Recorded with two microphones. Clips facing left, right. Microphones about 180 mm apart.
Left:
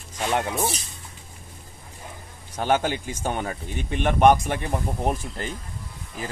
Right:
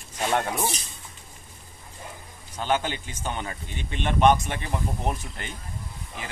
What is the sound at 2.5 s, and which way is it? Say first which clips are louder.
Speech: left 4 dB; 50° left (ahead or behind).